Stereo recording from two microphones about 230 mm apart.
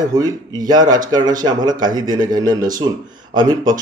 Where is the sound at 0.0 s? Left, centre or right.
Centre.